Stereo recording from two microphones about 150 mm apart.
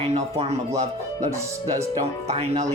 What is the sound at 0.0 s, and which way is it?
Speech, 45° right (ahead or behind).